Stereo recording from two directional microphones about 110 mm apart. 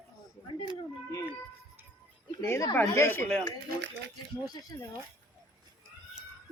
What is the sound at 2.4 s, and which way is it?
Speech, 20° left (ahead or behind).